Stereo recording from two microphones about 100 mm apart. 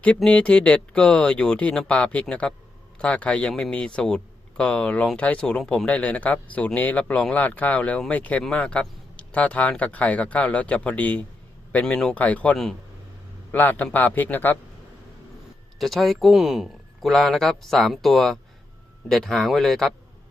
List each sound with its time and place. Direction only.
0.2 s a man's voice: 10° left (ahead or behind)
15.8 s speech: centre (ahead or behind)